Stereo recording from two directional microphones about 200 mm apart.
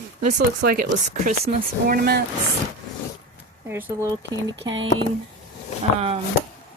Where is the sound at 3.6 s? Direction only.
10° right (ahead or behind).